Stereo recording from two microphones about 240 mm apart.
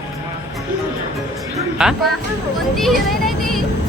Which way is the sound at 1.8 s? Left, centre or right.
Centre.